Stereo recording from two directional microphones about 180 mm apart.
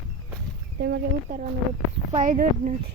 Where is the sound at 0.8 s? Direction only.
70° right (ahead or behind).